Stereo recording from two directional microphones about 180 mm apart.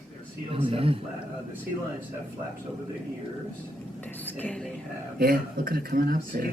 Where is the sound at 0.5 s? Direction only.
30° right (ahead or behind).